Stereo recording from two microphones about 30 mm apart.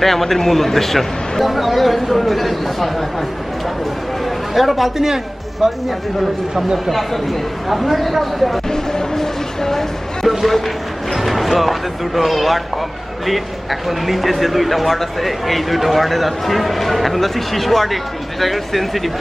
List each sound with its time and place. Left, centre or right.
0.0 s a man's voice: centre
1.4 s speech: centre
4.6 s speech: centre
4.9 s speech: centre
6.9 s speech: centre
8.6 s a man's voice: centre
10.2 s speech: centre